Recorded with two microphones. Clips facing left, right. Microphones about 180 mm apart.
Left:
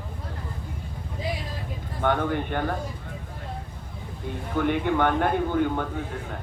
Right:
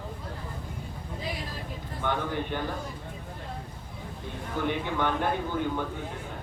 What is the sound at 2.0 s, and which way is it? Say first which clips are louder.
Speech: left 5 dB; 55° left (ahead or behind).